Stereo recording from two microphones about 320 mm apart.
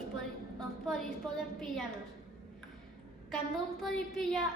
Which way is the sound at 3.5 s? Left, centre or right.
Centre.